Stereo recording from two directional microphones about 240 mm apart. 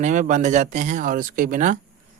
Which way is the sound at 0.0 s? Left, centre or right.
Right.